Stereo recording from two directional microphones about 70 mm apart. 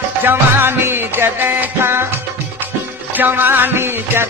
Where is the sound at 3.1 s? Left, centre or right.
Right.